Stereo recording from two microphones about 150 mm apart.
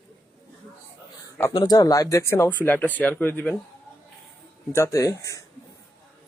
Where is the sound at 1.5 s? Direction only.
25° left (ahead or behind).